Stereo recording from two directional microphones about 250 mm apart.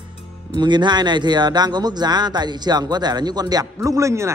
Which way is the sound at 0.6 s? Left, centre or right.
Centre.